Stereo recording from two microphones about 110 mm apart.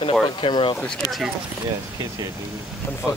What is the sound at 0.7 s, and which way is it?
Speech, 10° left (ahead or behind).